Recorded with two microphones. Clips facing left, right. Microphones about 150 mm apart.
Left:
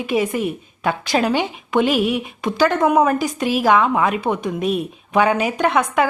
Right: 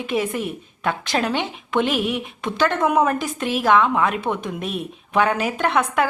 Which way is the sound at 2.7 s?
30° left (ahead or behind).